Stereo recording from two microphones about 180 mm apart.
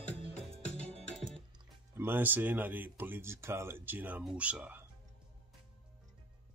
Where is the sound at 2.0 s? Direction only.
10° right (ahead or behind).